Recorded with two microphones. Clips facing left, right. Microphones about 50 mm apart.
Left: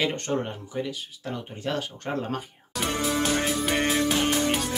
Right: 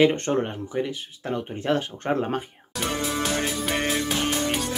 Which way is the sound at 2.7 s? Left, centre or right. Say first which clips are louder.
Left 1 dB; centre.